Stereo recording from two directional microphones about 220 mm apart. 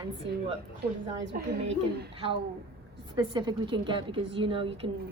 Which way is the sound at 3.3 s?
20° right (ahead or behind).